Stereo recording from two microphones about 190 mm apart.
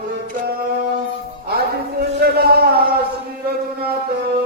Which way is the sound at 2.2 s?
55° right (ahead or behind).